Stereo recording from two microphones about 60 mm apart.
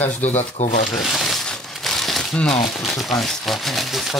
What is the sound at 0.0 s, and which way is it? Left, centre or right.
Speech, left.